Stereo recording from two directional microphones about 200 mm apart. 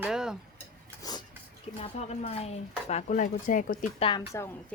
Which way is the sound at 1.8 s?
30° left (ahead or behind).